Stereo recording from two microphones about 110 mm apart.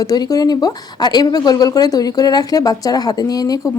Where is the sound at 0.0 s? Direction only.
35° left (ahead or behind).